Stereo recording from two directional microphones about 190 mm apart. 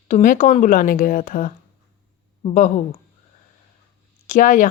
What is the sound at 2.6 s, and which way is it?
Speech, 45° left (ahead or behind).